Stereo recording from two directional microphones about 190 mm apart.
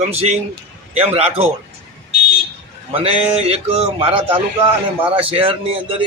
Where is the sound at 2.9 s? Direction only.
30° right (ahead or behind).